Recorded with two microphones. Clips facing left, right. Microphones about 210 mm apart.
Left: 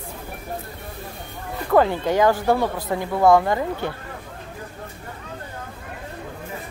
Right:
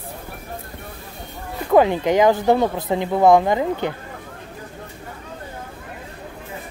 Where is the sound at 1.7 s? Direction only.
15° right (ahead or behind).